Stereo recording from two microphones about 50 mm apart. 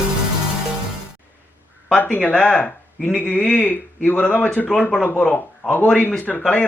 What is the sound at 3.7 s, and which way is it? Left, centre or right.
Speech, left.